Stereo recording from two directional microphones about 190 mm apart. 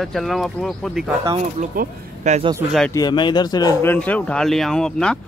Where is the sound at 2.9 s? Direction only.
20° left (ahead or behind).